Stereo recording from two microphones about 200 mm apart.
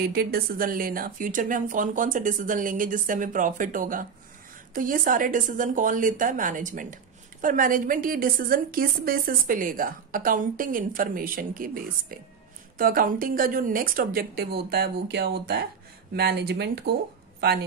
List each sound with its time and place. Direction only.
0.0 s a woman's voice: 50° right (ahead or behind)